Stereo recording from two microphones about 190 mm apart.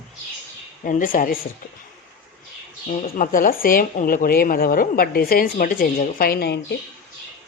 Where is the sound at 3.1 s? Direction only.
45° left (ahead or behind).